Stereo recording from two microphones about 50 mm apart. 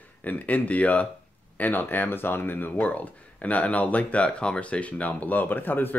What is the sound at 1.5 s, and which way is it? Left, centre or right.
Speech, left.